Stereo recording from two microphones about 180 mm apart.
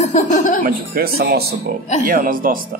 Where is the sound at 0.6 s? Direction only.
55° right (ahead or behind).